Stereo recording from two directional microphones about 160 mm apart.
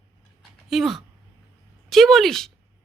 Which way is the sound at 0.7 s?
Centre (ahead or behind).